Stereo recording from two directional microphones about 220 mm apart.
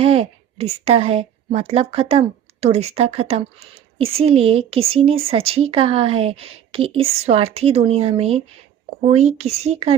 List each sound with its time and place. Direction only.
0.0 s a woman's voice: 25° right (ahead or behind)